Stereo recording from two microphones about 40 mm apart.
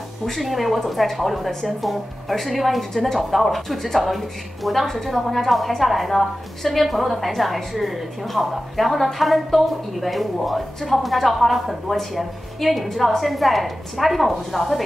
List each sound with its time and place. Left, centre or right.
0.3 s a woman's voice: centre